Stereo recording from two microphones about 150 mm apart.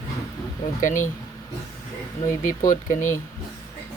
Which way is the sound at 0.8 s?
60° left (ahead or behind).